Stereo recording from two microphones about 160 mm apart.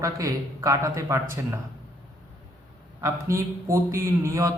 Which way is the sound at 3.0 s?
20° right (ahead or behind).